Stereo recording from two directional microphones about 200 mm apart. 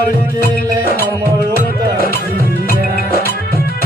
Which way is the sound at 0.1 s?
45° left (ahead or behind).